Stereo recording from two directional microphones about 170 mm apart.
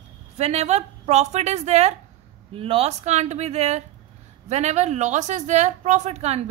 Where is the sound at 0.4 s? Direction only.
40° right (ahead or behind).